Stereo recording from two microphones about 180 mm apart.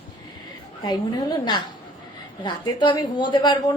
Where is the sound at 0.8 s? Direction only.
25° left (ahead or behind).